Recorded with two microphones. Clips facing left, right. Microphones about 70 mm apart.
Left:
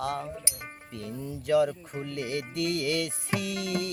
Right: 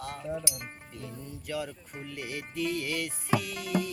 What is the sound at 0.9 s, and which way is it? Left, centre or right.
Music, left.